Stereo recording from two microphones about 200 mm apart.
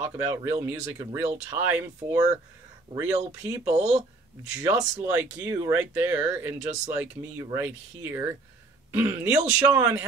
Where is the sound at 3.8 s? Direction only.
35° right (ahead or behind).